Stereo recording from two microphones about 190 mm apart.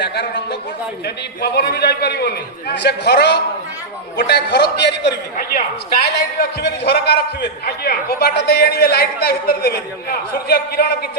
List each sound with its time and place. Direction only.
0.0 s a man's voice: 60° left (ahead or behind)